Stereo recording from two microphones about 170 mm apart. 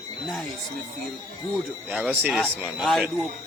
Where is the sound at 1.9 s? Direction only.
10° right (ahead or behind).